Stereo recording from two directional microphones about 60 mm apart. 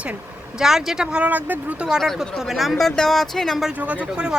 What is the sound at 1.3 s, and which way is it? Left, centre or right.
Speech, right.